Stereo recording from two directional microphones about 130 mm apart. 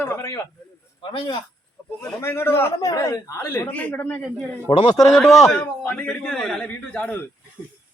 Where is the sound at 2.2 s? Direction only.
20° left (ahead or behind).